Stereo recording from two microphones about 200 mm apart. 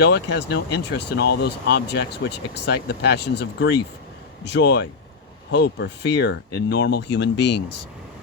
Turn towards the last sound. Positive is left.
turn(degrees=60)  # may be behind; listen again after turning